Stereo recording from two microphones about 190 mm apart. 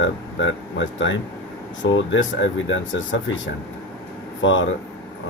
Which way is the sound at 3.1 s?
75° left (ahead or behind).